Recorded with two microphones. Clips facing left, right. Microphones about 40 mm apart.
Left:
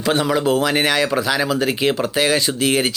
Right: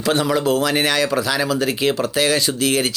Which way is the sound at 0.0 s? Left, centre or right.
Centre.